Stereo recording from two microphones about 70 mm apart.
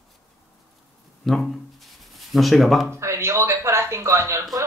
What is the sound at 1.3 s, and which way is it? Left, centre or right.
Speech, centre.